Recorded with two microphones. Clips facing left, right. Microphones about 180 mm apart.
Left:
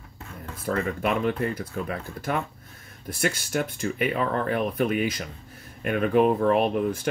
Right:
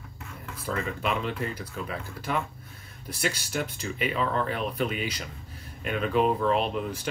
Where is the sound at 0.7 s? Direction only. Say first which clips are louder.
Left 4 dB; 50° left (ahead or behind).